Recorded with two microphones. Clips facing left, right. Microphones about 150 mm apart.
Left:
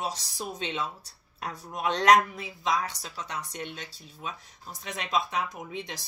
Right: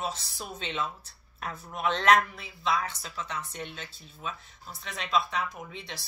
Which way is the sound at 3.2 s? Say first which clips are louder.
Left 4 dB; 10° left (ahead or behind).